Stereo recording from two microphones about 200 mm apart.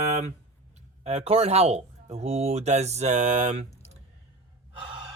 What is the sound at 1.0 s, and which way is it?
Speech, 30° right (ahead or behind).